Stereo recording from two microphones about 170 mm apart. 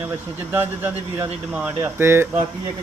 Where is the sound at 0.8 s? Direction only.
10° right (ahead or behind).